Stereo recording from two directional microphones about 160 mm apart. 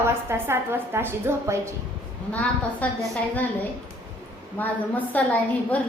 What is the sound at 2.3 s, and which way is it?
Speech, 10° left (ahead or behind).